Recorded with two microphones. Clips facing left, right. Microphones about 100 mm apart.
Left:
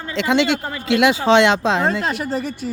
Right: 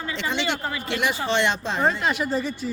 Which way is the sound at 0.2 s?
90° left.